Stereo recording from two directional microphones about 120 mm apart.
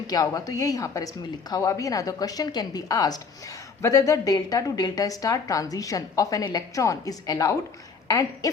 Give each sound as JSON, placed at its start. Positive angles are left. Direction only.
{"t": 0.1, "sound": "a woman's voice", "side_deg": 30}